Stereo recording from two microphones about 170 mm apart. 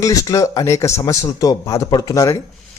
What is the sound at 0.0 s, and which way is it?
A man's voice, 20° left (ahead or behind).